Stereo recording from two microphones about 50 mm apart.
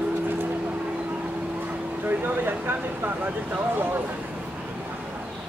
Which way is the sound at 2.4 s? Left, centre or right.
Right.